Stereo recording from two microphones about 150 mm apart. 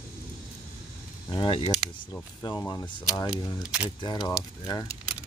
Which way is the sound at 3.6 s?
5° right (ahead or behind).